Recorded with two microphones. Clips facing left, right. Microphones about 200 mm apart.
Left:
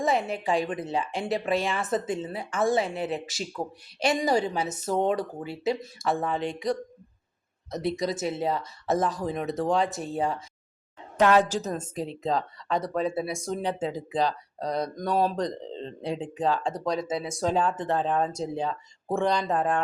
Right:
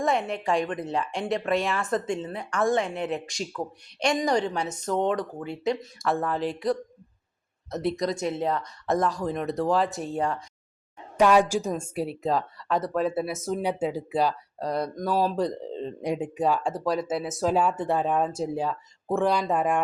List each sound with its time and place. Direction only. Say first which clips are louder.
0.0 s a woman's voice: even; centre (ahead or behind)
11.2 s speech: right 1 dB; 10° right (ahead or behind)